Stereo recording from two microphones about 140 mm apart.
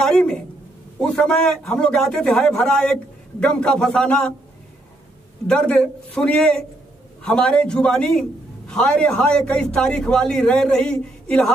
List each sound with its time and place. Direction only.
0.0 s a sound: 5° left (ahead or behind)
1.0 s a man's voice: 5° left (ahead or behind)
5.5 s a man's voice: 10° left (ahead or behind)